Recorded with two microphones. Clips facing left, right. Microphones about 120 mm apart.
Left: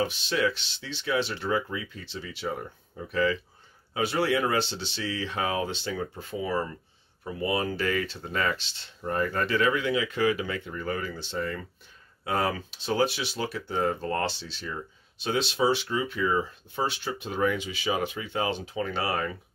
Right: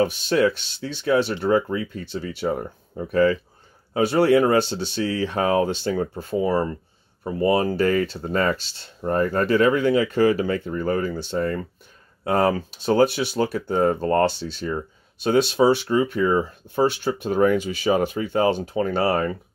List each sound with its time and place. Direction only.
0.0 s speech: 45° right (ahead or behind)